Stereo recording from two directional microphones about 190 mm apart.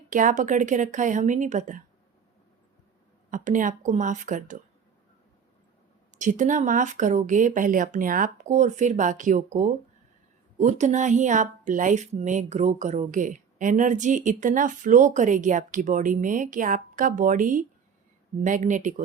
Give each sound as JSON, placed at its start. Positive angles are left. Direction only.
{"t": 0.1, "sound": "speech", "side_deg": -40}
{"t": 3.2, "sound": "speech", "side_deg": -45}
{"t": 6.1, "sound": "speech", "side_deg": -40}